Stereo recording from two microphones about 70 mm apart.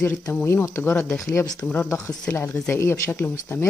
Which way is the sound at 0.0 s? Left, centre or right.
Left.